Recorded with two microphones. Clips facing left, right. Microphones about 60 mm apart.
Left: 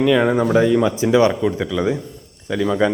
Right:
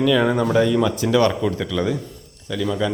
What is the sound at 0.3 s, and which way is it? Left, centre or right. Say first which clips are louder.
Speech: left 2 dB; centre.